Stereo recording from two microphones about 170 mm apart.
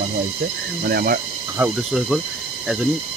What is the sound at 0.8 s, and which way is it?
Speech, 60° right (ahead or behind).